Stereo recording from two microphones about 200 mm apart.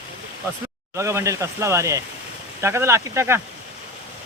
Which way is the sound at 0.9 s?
15° right (ahead or behind).